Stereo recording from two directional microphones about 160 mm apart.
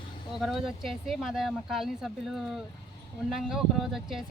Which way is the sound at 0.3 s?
Centre (ahead or behind).